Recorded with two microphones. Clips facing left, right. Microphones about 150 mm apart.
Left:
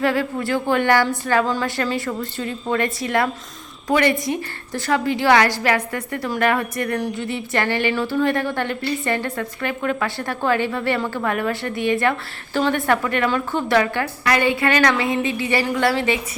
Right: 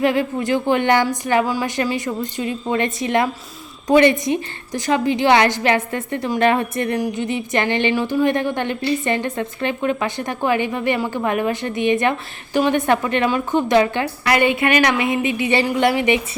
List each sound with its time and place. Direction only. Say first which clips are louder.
0.0 s a woman's voice: right 2 dB; 20° right (ahead or behind)